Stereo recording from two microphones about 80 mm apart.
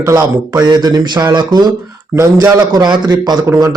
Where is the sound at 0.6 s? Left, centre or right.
Right.